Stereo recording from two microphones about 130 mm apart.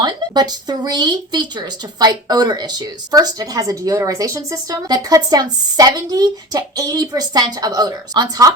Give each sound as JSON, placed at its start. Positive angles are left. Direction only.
{"t": 0.0, "sound": "speech", "side_deg": -30}